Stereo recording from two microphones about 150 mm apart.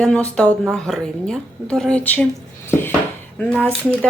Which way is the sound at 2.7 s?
15° left (ahead or behind).